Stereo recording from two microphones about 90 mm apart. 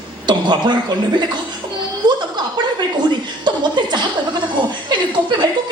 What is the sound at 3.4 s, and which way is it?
Chuckle, 55° right (ahead or behind).